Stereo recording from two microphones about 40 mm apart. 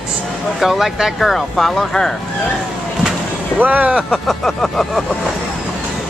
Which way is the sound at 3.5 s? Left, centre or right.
Right.